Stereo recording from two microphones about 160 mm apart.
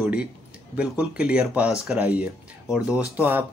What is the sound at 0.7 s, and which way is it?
Speech, 5° right (ahead or behind).